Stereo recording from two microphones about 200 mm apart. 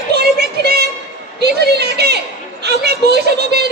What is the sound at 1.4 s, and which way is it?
Chatter, 55° right (ahead or behind).